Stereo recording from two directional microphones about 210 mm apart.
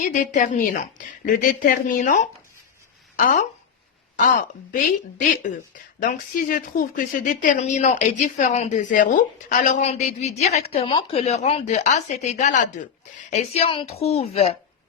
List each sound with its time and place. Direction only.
0.0 s a woman's voice: 35° left (ahead or behind)
6.0 s a woman's voice: 40° left (ahead or behind)